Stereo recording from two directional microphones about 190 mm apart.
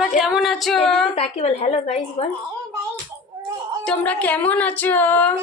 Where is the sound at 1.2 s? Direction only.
35° left (ahead or behind).